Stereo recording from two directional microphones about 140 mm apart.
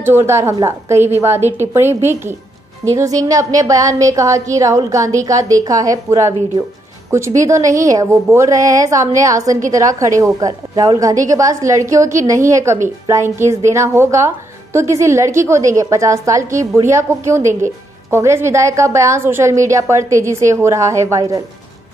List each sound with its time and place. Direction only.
0.0 s a woman's voice: 15° right (ahead or behind)
18.1 s a woman's voice: 20° right (ahead or behind)